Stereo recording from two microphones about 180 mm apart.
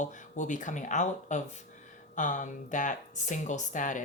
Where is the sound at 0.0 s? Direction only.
45° left (ahead or behind).